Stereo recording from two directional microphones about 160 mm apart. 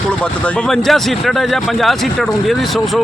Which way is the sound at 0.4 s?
Centre (ahead or behind).